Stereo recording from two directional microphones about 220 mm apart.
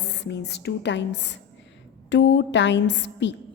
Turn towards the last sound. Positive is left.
turn(degrees=55)  # may be behind; listen again after turning